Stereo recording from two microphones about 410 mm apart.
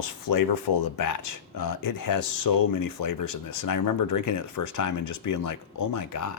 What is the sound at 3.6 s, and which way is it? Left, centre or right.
Speech, left.